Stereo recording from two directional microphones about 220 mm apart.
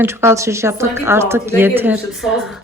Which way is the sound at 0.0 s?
10° right (ahead or behind).